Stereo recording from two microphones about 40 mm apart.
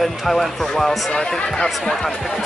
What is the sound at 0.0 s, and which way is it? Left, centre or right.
Speech, centre.